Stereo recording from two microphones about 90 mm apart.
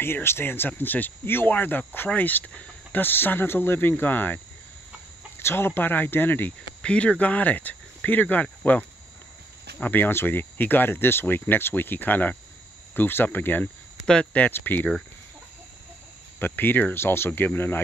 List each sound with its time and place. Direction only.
0.0 s speech: 25° left (ahead or behind)
5.4 s speech: 25° left (ahead or behind)
16.3 s speech: 25° left (ahead or behind)